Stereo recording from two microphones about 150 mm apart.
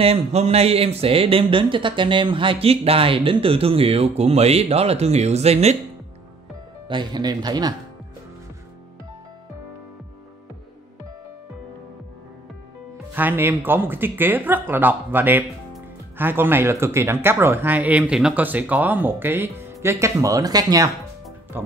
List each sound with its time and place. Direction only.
0.0 s speech: 45° right (ahead or behind)
6.9 s speech: 30° right (ahead or behind)
13.1 s speech: 15° right (ahead or behind)